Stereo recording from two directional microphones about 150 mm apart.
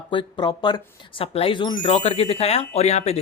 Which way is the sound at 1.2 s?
40° left (ahead or behind).